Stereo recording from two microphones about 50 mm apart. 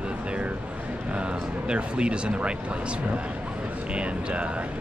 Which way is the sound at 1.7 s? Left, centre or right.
Right.